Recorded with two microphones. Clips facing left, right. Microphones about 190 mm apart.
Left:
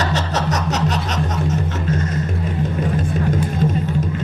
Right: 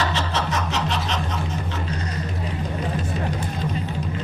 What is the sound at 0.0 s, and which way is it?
Snicker, 45° left (ahead or behind).